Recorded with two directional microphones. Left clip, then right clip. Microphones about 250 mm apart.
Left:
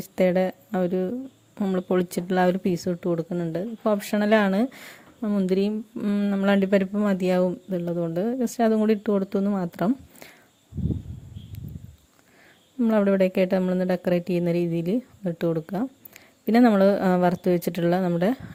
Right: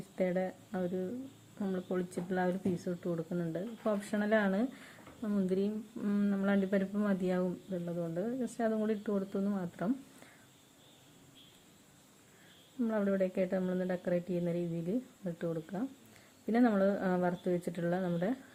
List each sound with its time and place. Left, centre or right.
0.2 s speech: left
12.8 s speech: left